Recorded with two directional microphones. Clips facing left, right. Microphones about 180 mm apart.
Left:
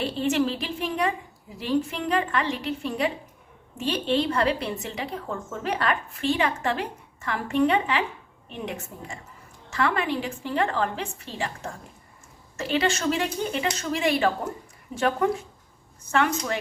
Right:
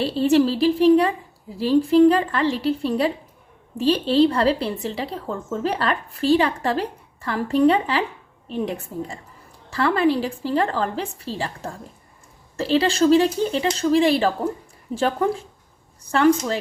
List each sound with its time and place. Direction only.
0.0 s a woman's voice: 35° right (ahead or behind)